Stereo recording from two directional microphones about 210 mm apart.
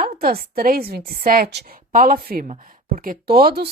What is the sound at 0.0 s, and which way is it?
A woman's voice, 45° right (ahead or behind).